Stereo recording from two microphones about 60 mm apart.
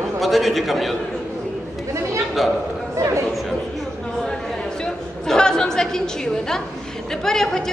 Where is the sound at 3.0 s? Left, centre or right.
Right.